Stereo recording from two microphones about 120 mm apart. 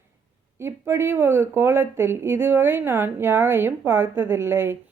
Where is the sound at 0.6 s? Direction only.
20° right (ahead or behind).